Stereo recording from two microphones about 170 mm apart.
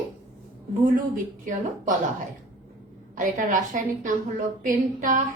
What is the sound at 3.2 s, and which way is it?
A woman's voice, 50° right (ahead or behind).